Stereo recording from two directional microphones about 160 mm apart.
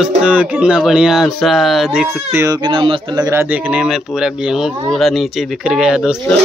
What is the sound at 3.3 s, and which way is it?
Speech, 15° right (ahead or behind).